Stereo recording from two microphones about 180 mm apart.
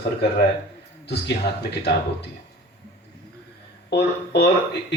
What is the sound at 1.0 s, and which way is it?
Speech, 65° left (ahead or behind).